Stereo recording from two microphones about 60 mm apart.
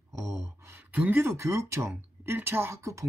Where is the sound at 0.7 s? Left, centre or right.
Right.